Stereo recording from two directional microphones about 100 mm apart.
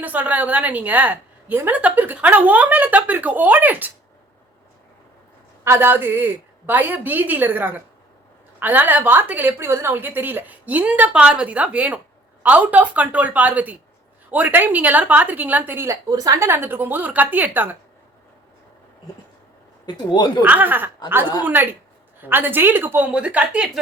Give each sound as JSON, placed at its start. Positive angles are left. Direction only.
{"t": 0.0, "sound": "a woman's voice", "side_deg": -15}
{"t": 5.6, "sound": "a woman's voice", "side_deg": -25}
{"t": 19.8, "sound": "speech", "side_deg": 45}
{"t": 20.4, "sound": "a woman's voice", "side_deg": -15}